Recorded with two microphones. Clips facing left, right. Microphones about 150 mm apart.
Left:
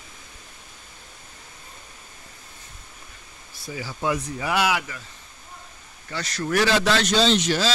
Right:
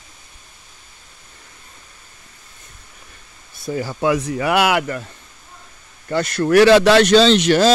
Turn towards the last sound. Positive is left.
turn(degrees=-70)  # may be behind; listen again after turning